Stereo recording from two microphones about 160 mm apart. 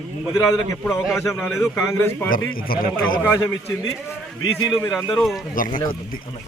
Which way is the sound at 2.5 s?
65° left (ahead or behind).